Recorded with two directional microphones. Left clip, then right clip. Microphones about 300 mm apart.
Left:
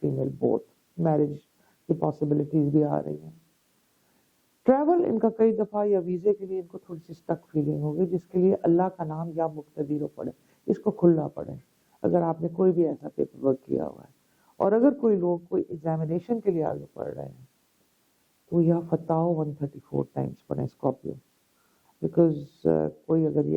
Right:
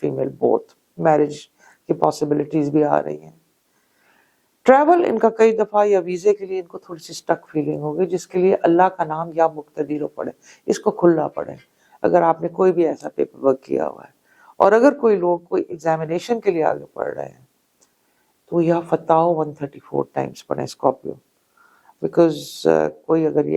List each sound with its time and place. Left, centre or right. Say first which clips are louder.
0.1 s speech: right 10 dB; centre
4.6 s speech: right 9 dB; centre
7.0 s speech: right 10 dB; centre
10.8 s speech: right 7 dB; centre
18.6 s speech: right 8 dB; centre
22.0 s speech: right 7 dB; centre